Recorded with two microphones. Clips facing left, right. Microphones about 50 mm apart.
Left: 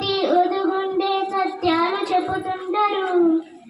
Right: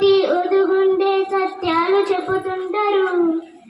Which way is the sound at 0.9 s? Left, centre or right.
Right.